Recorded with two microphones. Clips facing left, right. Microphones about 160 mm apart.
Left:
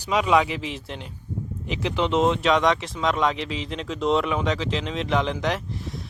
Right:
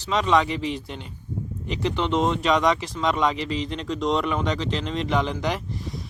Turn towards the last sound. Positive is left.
turn(degrees=0)  # may be behind; listen again after turning